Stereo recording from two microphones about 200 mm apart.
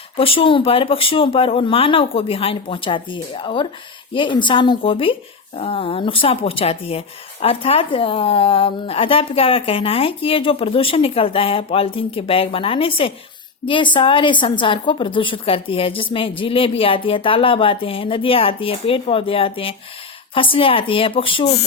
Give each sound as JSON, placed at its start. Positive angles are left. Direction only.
{"t": 0.2, "sound": "speech", "side_deg": 25}